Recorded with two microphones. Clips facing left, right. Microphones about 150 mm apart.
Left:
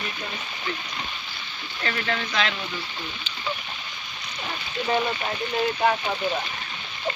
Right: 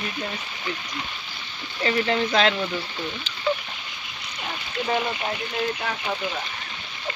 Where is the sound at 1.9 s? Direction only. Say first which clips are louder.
Right 6 dB; 30° right (ahead or behind).